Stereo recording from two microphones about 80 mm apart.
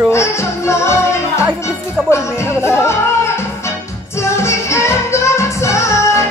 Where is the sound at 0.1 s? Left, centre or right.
Left.